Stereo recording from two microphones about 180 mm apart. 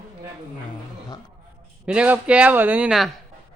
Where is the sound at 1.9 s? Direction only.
5° right (ahead or behind).